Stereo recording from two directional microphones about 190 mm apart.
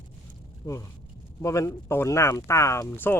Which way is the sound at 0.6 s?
15° left (ahead or behind).